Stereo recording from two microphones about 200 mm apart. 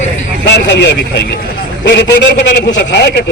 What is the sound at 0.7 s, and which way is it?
Speech, 55° left (ahead or behind).